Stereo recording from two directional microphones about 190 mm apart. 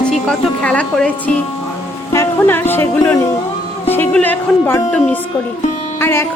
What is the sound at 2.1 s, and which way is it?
Speech, 10° left (ahead or behind).